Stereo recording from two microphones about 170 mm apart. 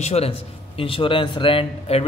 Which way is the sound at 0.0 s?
40° left (ahead or behind).